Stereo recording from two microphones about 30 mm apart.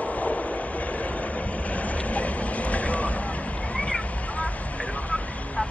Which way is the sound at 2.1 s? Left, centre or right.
Left.